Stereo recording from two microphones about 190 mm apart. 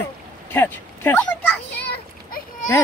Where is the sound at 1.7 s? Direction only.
60° left (ahead or behind).